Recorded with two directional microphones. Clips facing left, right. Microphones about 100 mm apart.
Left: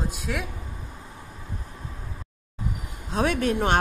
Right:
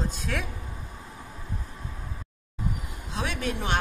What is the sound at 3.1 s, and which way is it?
Speech, 50° left (ahead or behind).